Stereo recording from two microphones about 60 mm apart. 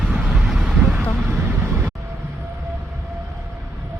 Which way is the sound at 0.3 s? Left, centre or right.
Centre.